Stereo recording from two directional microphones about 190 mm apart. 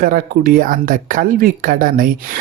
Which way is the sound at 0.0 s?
50° right (ahead or behind).